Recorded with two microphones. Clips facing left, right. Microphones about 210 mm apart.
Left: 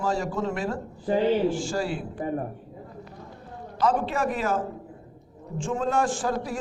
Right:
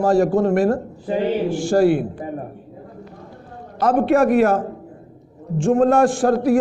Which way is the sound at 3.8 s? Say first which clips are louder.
Right 9 dB; 60° right (ahead or behind).